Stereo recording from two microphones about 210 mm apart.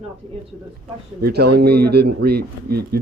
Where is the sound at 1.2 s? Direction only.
50° right (ahead or behind).